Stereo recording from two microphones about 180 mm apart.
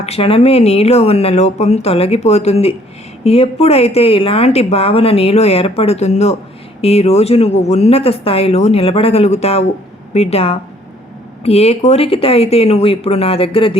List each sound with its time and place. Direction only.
0.0 s speech: 35° left (ahead or behind)